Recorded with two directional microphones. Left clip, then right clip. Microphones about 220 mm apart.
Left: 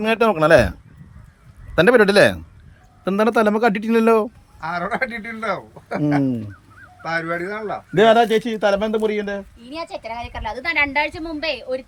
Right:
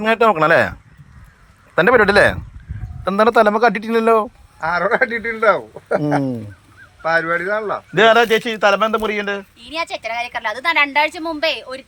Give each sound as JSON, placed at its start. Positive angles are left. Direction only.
{"t": 0.0, "sound": "a man's voice", "side_deg": 20}
{"t": 4.6, "sound": "speech", "side_deg": -20}
{"t": 7.3, "sound": "speech", "side_deg": -15}
{"t": 7.9, "sound": "a man's voice", "side_deg": 15}